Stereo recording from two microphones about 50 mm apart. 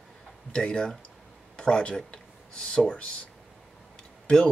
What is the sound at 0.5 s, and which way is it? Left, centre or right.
Speech, centre.